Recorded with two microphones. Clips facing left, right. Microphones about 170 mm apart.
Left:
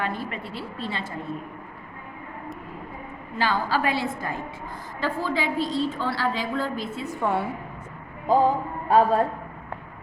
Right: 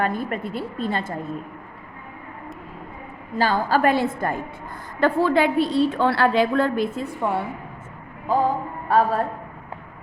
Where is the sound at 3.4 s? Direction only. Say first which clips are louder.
Right 5 dB; 45° right (ahead or behind); by 6.9 s 60° right (ahead or behind).